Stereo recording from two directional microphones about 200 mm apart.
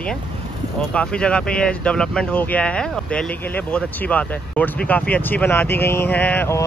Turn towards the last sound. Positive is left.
turn(degrees=10)  # may be behind; listen again after turning